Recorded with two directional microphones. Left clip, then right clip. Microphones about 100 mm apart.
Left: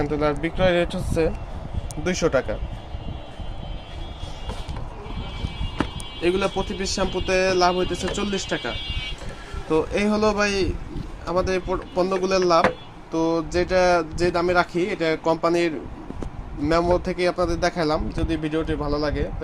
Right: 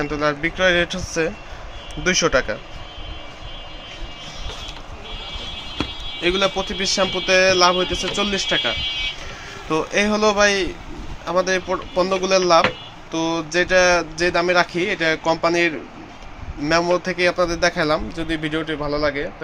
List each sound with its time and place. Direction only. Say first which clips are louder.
0.0 s speech: right 2 dB; 25° left (ahead or behind)
2.0 s speech: right 4 dB; 10° left (ahead or behind)
6.3 s a man's voice: right 4 dB; 5° left (ahead or behind)
9.6 s a man's voice: right 2 dB; 10° left (ahead or behind)
13.1 s a man's voice: even; 15° left (ahead or behind)